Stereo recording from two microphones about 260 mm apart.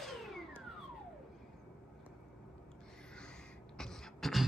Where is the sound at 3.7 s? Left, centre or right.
Centre.